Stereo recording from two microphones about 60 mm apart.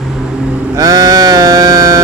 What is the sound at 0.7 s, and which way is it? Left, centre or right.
Sheep, right.